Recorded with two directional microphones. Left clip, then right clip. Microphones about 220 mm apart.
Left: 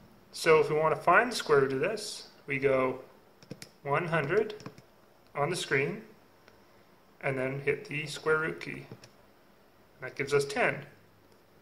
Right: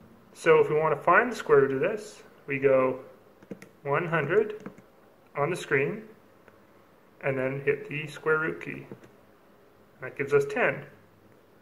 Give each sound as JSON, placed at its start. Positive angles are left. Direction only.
{"t": 0.4, "sound": "speech", "side_deg": 20}
{"t": 7.2, "sound": "speech", "side_deg": 20}
{"t": 9.9, "sound": "speech", "side_deg": 20}